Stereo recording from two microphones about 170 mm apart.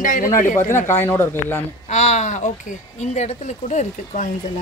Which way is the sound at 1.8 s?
40° left (ahead or behind).